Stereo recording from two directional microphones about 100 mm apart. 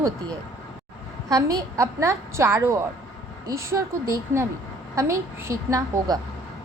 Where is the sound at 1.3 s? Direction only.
35° right (ahead or behind).